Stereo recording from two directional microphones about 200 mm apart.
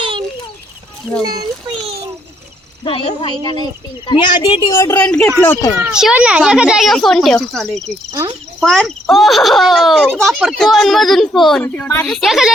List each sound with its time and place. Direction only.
0.0 s a sound: 25° right (ahead or behind)
1.2 s a child's voice: 20° right (ahead or behind)
3.2 s speech: 20° left (ahead or behind)
5.8 s a child's voice: 5° right (ahead or behind)